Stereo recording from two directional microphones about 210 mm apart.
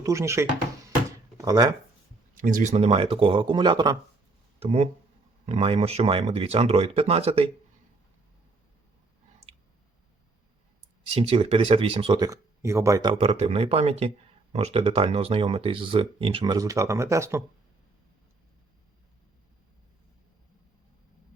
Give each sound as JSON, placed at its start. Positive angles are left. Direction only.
{"t": 0.0, "sound": "speech", "side_deg": -15}
{"t": 2.3, "sound": "speech", "side_deg": -40}
{"t": 11.1, "sound": "speech", "side_deg": -25}